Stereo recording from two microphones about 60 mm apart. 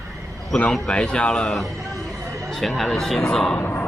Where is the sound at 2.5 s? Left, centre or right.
Centre.